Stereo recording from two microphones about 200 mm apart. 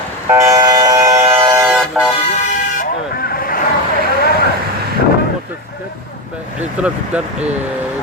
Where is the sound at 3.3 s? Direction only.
45° left (ahead or behind).